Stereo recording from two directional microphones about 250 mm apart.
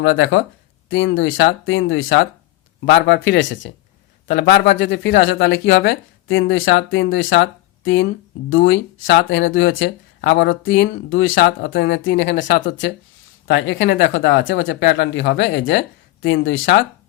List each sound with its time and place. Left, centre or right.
0.0 s speech: left
8.4 s speech: left